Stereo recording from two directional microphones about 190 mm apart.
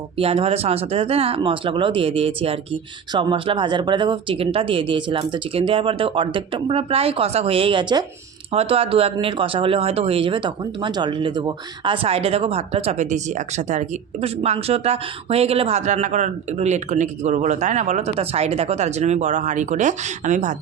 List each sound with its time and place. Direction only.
0.2 s speech: 30° right (ahead or behind)